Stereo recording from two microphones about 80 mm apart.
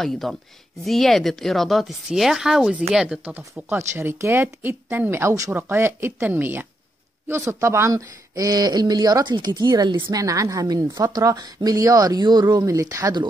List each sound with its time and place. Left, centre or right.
0.0 s speech: centre
3.5 s speech: right
7.2 s speech: right
8.4 s speech: right
9.8 s a woman's voice: right
10.1 s speech: right